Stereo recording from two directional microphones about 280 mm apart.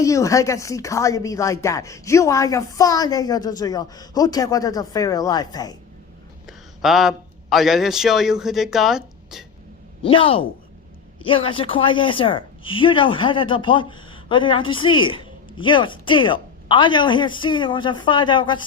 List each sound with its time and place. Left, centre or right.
0.0 s speech: centre
6.8 s a man's voice: centre
10.0 s speech: centre